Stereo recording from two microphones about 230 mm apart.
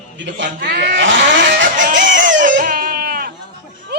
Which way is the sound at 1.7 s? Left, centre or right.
Right.